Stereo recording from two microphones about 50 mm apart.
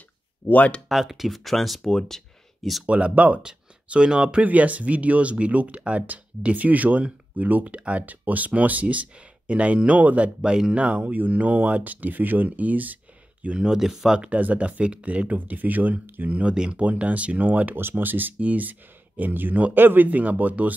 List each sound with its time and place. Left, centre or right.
0.5 s speech: left
0.8 s speech: centre
2.9 s speech: right
4.4 s speech: right
13.6 s speech: centre
14.4 s speech: right
16.4 s speech: centre
16.8 s speech: right
17.7 s speech: right
20.1 s speech: right